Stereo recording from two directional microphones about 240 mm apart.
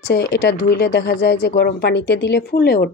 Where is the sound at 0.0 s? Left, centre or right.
Left.